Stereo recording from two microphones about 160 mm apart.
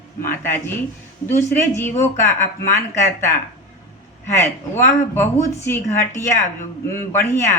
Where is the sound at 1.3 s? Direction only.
15° left (ahead or behind).